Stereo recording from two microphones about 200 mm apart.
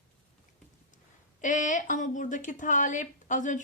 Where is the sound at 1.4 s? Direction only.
40° left (ahead or behind).